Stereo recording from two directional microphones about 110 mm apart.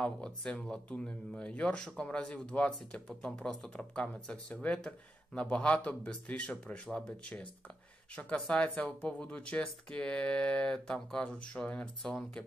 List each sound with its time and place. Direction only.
0.0 s speech: 10° left (ahead or behind)